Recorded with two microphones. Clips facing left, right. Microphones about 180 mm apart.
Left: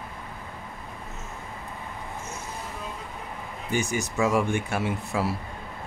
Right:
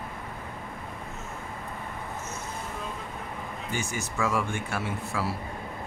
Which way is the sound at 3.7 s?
15° left (ahead or behind).